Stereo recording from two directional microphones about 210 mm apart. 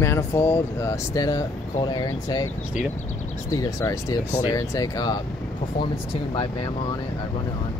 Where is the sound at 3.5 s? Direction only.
15° left (ahead or behind).